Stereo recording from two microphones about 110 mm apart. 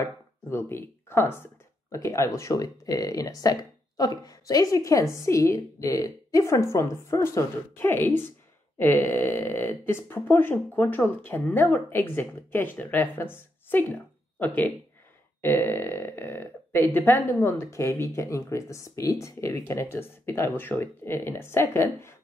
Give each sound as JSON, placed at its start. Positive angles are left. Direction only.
{"t": 0.0, "sound": "speech", "side_deg": 25}